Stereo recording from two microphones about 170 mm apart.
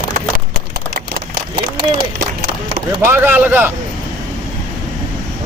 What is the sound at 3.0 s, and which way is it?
Speech, 15° right (ahead or behind).